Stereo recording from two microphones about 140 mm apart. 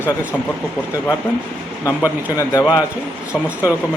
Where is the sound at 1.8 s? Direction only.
25° left (ahead or behind).